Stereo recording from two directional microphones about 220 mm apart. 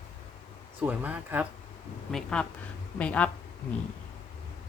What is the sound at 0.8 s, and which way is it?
Speech, 10° right (ahead or behind).